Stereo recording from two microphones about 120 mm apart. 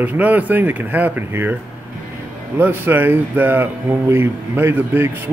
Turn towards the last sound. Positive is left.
turn(degrees=-15)  # may be behind; listen again after turning